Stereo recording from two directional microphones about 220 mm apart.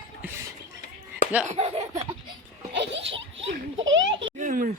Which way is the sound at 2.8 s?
55° right (ahead or behind).